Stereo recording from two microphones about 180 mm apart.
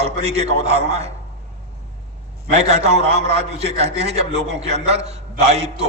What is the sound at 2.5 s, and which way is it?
A man's voice, 35° right (ahead or behind).